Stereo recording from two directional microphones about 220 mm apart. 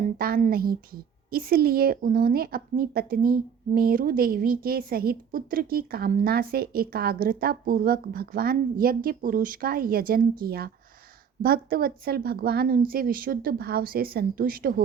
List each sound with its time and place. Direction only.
0.2 s a woman's voice: 40° right (ahead or behind)